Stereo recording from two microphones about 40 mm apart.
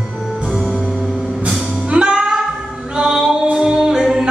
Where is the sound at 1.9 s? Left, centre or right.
Right.